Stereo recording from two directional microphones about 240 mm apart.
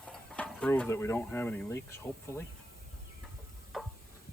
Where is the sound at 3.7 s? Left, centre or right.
Centre.